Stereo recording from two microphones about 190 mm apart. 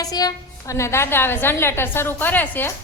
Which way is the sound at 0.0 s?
20° left (ahead or behind).